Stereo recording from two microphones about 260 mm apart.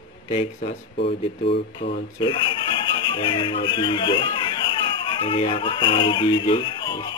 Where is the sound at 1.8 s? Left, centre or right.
Left.